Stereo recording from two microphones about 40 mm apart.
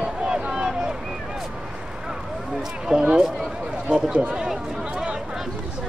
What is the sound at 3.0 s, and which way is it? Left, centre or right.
Run, right.